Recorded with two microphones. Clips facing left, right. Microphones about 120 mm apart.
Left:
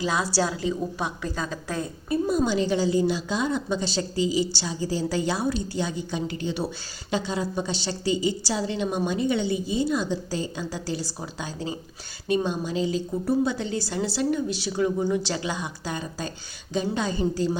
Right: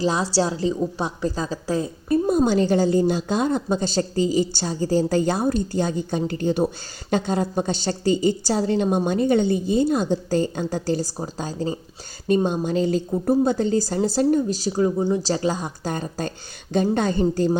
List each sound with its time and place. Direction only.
0.0 s a woman's voice: 30° right (ahead or behind)
2.0 s a woman's voice: 45° right (ahead or behind)